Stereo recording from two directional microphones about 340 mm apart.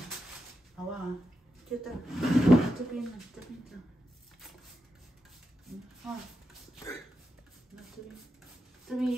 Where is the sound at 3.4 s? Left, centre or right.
Centre.